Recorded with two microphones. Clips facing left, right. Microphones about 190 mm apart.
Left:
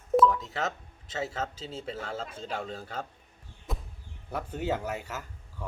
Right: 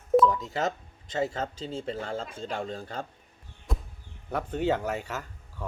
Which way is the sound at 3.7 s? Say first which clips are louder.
Right 2 dB; centre (ahead or behind).